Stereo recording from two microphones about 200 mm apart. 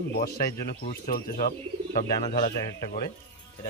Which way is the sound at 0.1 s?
50° left (ahead or behind).